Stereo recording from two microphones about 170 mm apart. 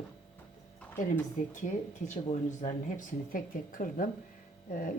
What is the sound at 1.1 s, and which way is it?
Speech, 50° left (ahead or behind).